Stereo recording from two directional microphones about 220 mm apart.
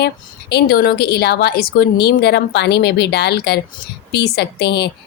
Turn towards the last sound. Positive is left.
turn(degrees=50)  # may be behind; listen again after turning